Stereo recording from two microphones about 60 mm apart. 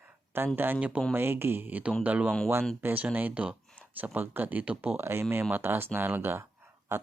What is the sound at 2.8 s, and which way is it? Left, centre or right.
Speech, right.